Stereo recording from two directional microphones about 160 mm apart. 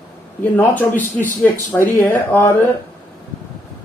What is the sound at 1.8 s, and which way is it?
Speech, 10° left (ahead or behind).